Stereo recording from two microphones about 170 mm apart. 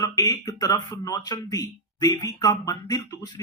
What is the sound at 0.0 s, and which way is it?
Speech, 20° left (ahead or behind).